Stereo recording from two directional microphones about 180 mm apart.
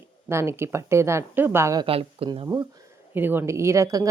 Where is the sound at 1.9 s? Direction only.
30° right (ahead or behind).